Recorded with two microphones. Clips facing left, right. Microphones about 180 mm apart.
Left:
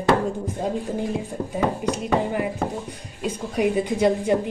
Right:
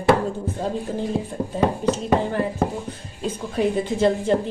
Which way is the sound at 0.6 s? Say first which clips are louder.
Left 1 dB; 15° left (ahead or behind).